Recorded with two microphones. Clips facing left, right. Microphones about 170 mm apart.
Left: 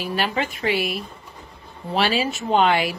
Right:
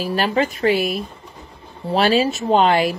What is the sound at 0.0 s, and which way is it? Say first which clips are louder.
A woman's voice: right 5 dB; 40° right (ahead or behind).